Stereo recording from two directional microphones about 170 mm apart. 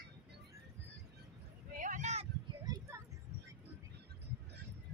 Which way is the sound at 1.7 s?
50° right (ahead or behind).